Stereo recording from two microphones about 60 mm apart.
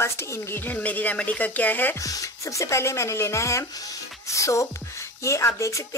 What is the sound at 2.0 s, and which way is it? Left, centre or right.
Speech, left.